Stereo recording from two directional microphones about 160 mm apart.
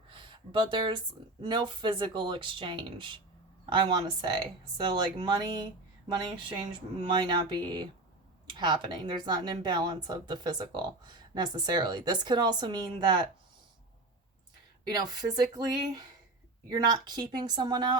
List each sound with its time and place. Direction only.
0.1 s speech: 30° right (ahead or behind)
14.8 s speech: 25° right (ahead or behind)